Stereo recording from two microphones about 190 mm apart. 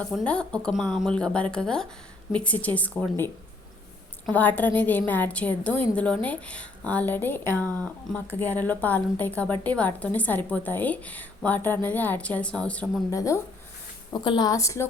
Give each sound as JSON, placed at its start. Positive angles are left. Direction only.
{"t": 0.0, "sound": "a woman's voice", "side_deg": 5}
{"t": 4.3, "sound": "a woman's voice", "side_deg": 10}